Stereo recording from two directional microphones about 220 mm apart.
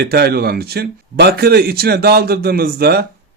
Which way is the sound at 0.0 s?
45° right (ahead or behind).